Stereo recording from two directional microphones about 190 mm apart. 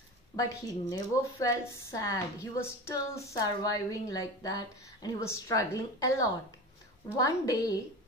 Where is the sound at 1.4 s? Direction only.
15° left (ahead or behind).